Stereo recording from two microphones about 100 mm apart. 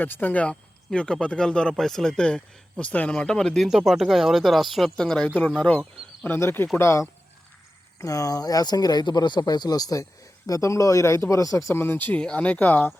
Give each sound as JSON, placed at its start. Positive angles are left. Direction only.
{"t": 0.0, "sound": "speech", "side_deg": 20}